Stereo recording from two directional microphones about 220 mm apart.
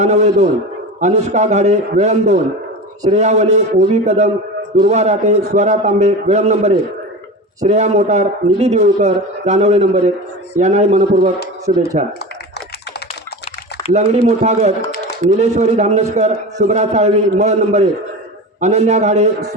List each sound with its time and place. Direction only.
0.0 s a man's voice: 30° right (ahead or behind)
13.9 s a man's voice: 30° right (ahead or behind)